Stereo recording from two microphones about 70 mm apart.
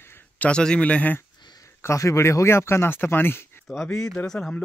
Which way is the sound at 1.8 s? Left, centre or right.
Left.